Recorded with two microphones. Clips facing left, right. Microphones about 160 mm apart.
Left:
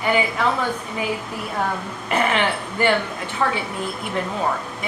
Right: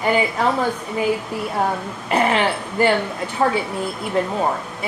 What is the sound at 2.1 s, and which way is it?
Throat clearing, 35° right (ahead or behind).